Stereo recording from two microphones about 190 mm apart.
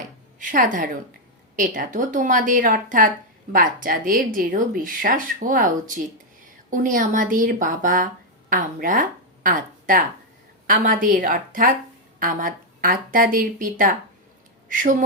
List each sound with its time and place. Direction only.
0.3 s a woman's voice: 45° right (ahead or behind)